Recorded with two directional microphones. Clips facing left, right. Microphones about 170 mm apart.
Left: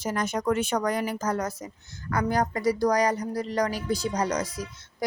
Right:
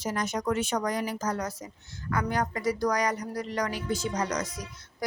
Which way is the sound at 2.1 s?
35° left (ahead or behind).